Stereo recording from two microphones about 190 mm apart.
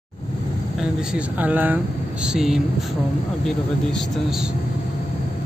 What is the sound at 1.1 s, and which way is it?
A man's voice, 10° right (ahead or behind).